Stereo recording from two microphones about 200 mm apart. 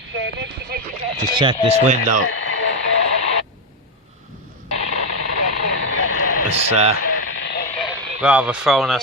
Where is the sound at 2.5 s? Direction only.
70° left (ahead or behind).